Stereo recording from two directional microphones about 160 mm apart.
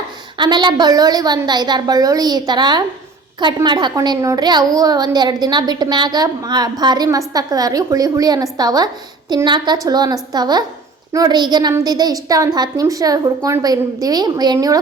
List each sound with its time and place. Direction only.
0.3 s a woman's voice: 30° right (ahead or behind)